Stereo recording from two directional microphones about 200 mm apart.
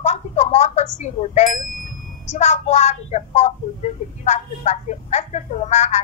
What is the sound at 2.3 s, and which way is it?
Speech, 35° left (ahead or behind).